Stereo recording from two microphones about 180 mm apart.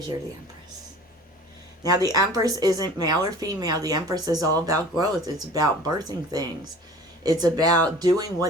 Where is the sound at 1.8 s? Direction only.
20° right (ahead or behind).